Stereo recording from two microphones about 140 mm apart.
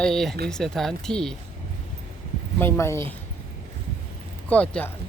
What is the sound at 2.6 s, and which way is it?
Speech, 20° left (ahead or behind).